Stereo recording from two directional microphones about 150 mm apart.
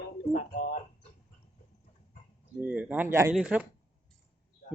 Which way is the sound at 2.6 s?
10° right (ahead or behind).